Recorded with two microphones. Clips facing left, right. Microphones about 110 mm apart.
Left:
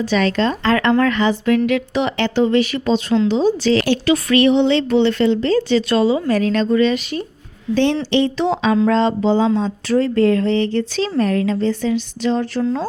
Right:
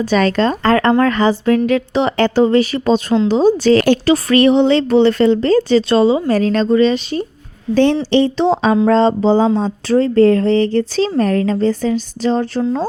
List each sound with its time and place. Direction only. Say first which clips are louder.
0.0 s speech: right 3 dB; 45° right (ahead or behind)
7.7 s speech: right 4 dB; 45° right (ahead or behind)